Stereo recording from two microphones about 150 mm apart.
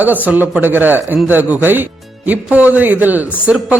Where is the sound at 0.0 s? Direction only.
10° right (ahead or behind).